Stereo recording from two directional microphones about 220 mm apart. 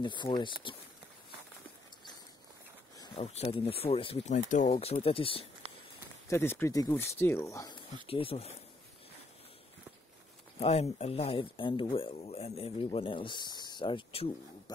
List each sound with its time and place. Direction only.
0.0 s speech: 20° left (ahead or behind)
3.2 s speech: 30° left (ahead or behind)
6.2 s speech: 10° left (ahead or behind)
8.1 s speech: 25° left (ahead or behind)
10.6 s speech: 25° left (ahead or behind)